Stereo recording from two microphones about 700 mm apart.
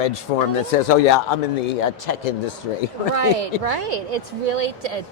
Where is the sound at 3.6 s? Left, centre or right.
Right.